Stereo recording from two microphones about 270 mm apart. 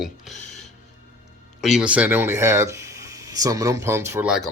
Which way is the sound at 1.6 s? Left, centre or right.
Centre.